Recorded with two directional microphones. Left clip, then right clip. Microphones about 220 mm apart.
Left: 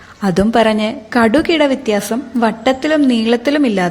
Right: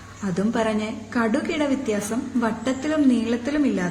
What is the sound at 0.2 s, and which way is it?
A woman's voice, 40° left (ahead or behind).